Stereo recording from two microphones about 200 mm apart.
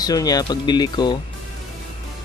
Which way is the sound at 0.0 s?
20° left (ahead or behind).